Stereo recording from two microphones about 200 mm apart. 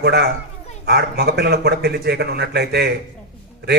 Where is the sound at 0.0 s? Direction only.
55° right (ahead or behind).